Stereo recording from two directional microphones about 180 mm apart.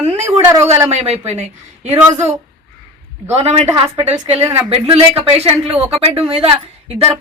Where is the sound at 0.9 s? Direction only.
35° right (ahead or behind).